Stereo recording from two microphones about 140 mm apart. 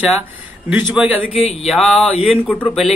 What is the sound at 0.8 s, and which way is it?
Speech, 10° right (ahead or behind).